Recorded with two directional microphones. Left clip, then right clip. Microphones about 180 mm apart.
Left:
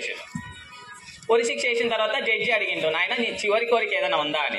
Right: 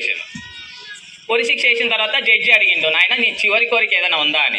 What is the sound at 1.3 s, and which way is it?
A man's voice, 30° left (ahead or behind).